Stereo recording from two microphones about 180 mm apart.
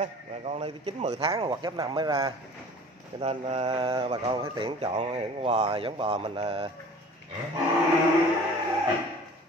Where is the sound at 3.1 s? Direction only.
35° right (ahead or behind).